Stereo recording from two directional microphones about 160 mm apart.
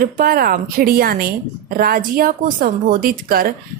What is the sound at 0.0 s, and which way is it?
A woman's voice, 65° right (ahead or behind).